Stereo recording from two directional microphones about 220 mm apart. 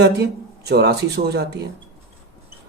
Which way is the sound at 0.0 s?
50° right (ahead or behind).